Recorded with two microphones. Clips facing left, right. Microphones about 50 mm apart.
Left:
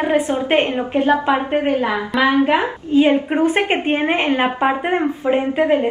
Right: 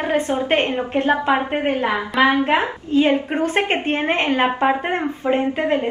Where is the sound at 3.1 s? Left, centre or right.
Centre.